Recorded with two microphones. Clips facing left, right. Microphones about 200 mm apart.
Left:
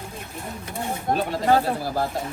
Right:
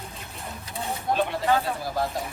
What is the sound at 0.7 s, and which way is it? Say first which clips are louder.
Speech: left 1 dB; 50° left (ahead or behind).